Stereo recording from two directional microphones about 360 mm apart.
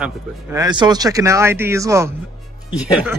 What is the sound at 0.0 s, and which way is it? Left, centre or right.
Speech, centre.